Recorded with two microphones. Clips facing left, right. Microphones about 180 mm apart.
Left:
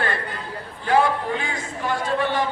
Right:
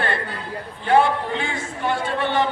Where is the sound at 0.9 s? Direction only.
25° right (ahead or behind).